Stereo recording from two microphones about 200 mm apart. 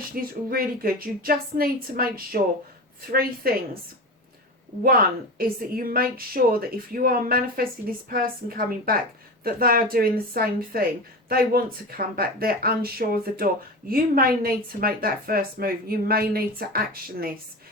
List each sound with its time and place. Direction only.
0.1 s speech: 45° right (ahead or behind)
4.8 s speech: 45° right (ahead or behind)